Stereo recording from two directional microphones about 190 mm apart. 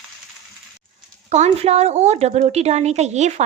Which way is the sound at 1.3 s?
35° right (ahead or behind).